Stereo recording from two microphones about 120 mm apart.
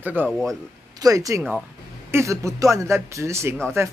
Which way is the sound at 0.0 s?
15° right (ahead or behind).